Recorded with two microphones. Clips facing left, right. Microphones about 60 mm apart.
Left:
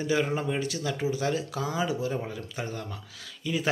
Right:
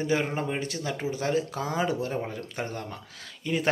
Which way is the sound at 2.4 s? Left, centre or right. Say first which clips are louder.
Right 1 dB; right.